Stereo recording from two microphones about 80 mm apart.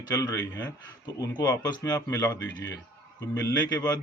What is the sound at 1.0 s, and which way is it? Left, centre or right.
Speech, left.